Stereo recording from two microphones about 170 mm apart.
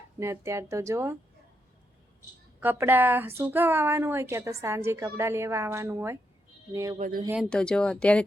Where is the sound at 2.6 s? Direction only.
10° right (ahead or behind).